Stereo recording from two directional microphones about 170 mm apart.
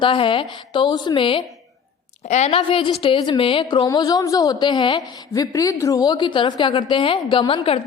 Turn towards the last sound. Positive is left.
turn(degrees=35)  # may be behind; listen again after turning